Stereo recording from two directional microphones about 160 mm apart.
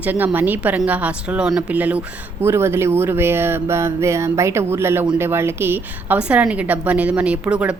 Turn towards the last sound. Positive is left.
turn(degrees=-10)  # may be behind; listen again after turning